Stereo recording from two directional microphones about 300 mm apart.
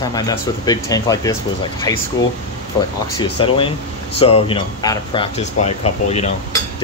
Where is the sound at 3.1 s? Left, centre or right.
Centre.